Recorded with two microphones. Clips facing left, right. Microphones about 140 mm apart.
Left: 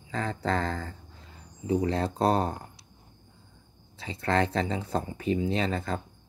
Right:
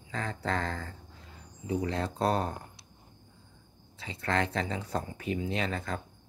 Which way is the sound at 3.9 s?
35° left (ahead or behind).